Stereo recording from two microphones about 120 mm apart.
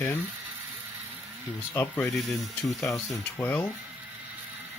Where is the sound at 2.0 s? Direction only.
Centre (ahead or behind).